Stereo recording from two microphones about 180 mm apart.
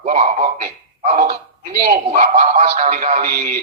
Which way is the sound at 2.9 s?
50° right (ahead or behind).